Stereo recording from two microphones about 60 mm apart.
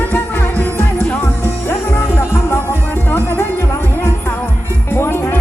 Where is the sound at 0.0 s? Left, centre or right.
Left.